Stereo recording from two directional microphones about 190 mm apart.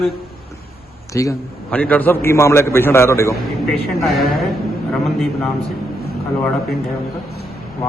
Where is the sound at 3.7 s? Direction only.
Centre (ahead or behind).